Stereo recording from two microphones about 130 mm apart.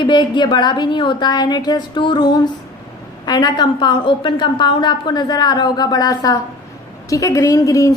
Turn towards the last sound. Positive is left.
turn(degrees=25)  # may be behind; listen again after turning